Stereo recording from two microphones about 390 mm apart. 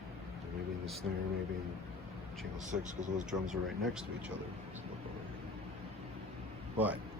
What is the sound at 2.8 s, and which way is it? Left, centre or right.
Speech, centre.